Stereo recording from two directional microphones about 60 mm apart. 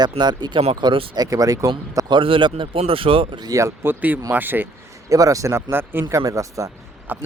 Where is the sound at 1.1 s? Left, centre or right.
Right.